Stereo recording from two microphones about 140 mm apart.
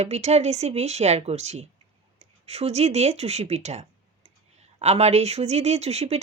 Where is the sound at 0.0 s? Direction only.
50° right (ahead or behind).